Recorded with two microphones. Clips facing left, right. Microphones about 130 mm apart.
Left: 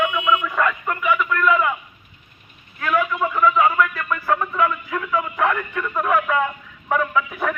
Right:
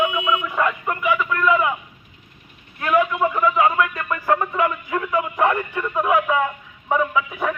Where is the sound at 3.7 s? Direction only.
40° right (ahead or behind).